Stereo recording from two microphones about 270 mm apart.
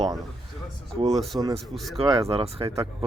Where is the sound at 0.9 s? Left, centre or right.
Right.